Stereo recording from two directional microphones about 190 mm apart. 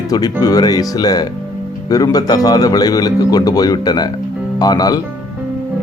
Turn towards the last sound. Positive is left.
turn(degrees=20)  # may be behind; listen again after turning